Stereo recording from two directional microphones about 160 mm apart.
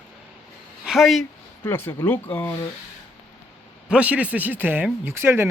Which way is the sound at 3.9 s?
10° right (ahead or behind).